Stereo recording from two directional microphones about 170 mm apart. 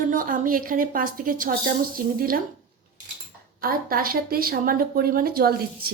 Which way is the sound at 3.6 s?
60° right (ahead or behind).